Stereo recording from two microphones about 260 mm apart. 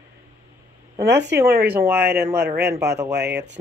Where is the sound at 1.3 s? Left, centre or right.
Centre.